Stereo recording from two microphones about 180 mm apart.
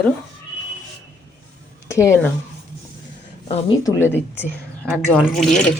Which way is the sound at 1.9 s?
15° left (ahead or behind).